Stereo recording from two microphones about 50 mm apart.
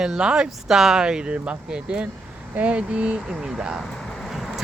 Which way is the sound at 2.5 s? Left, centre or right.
Right.